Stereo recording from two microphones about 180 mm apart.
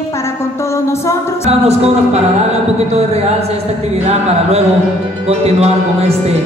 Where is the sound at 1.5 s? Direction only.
35° right (ahead or behind).